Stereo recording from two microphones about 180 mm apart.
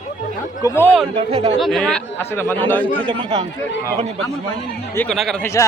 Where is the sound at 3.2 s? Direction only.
35° right (ahead or behind).